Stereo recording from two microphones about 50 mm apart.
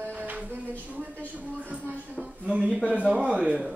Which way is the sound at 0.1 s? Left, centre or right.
Right.